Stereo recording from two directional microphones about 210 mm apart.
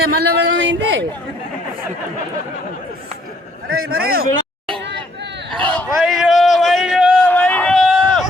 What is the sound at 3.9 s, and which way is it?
Speech, 45° right (ahead or behind).